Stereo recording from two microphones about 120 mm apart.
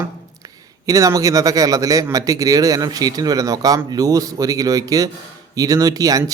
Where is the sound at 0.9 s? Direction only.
30° right (ahead or behind).